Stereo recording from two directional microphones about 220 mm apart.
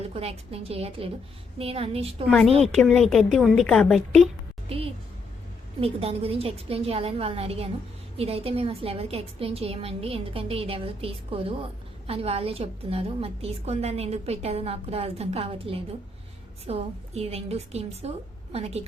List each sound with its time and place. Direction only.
0.1 s a woman's voice: 25° right (ahead or behind)
2.2 s a woman's voice: 5° left (ahead or behind)
4.7 s a woman's voice: 25° right (ahead or behind)